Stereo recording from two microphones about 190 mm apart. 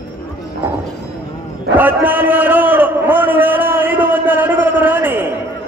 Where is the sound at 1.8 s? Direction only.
10° right (ahead or behind).